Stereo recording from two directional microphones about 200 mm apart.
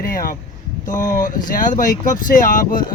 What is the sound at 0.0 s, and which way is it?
Speech, 45° left (ahead or behind).